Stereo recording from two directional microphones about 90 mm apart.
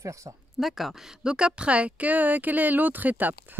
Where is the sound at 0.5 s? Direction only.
Centre (ahead or behind).